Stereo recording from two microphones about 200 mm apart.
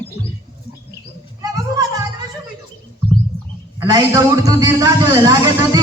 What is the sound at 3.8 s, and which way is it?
A man's voice, 20° right (ahead or behind).